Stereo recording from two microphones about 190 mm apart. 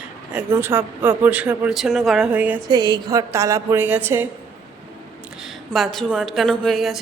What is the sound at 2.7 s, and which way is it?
Speech, 20° right (ahead or behind).